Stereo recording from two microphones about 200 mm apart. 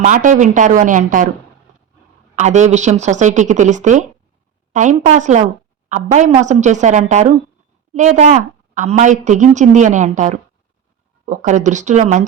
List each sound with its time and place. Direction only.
0.0 s a woman's voice: 40° right (ahead or behind)
2.3 s a woman's voice: 35° right (ahead or behind)